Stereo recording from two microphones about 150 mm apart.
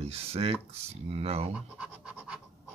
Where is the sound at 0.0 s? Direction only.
40° right (ahead or behind).